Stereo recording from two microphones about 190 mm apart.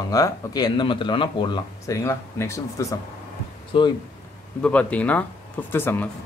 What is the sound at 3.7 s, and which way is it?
Speech, 25° left (ahead or behind).